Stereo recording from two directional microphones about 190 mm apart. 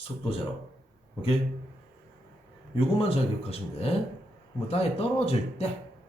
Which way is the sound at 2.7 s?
30° left (ahead or behind).